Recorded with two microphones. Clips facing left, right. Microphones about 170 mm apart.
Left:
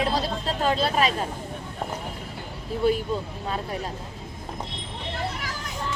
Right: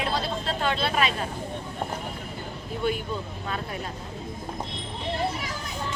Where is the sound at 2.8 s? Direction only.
35° left (ahead or behind).